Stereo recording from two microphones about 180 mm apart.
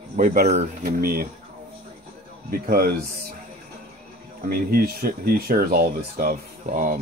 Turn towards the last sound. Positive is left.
turn(degrees=-45)  # may be behind; listen again after turning